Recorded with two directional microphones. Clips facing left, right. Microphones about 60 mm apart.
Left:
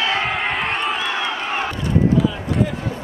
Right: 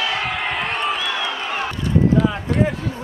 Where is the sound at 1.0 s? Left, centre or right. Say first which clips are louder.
Left 1 dB; left.